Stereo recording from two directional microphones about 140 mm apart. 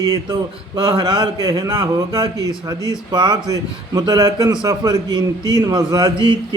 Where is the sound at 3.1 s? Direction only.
30° right (ahead or behind).